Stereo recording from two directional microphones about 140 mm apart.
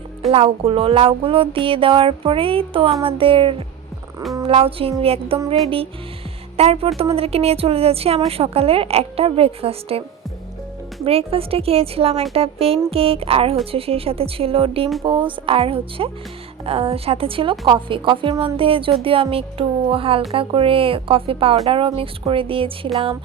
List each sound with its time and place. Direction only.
0.3 s music: 45° right (ahead or behind)
4.4 s speech: 40° right (ahead or behind)
5.6 s music: 40° right (ahead or behind)
6.6 s speech: 45° right (ahead or behind)
11.0 s speech: 45° right (ahead or behind)
15.0 s music: 35° right (ahead or behind)
16.6 s speech: 45° right (ahead or behind)
17.7 s music: 35° right (ahead or behind)